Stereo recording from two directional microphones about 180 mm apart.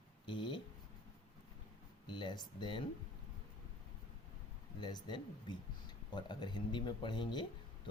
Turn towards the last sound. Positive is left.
turn(degrees=25)  # may be behind; listen again after turning